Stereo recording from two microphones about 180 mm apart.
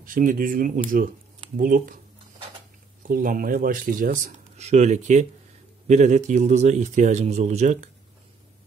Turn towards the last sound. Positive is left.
turn(degrees=-40)  # may be behind; listen again after turning